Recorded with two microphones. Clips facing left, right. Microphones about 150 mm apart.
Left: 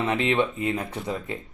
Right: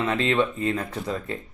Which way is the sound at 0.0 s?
20° left (ahead or behind).